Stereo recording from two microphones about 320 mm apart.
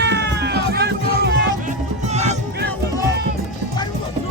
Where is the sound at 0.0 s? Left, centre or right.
Right.